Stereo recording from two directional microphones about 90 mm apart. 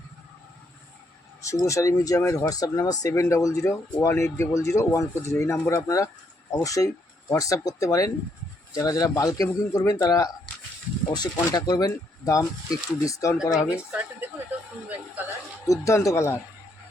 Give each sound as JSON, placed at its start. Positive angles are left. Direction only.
{"t": 1.6, "sound": "speech", "side_deg": 35}
{"t": 13.5, "sound": "speech", "side_deg": -5}
{"t": 14.8, "sound": "speech", "side_deg": -20}
{"t": 15.6, "sound": "speech", "side_deg": 35}